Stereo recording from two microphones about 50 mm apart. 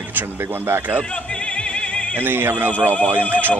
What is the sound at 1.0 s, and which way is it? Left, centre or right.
Music, left.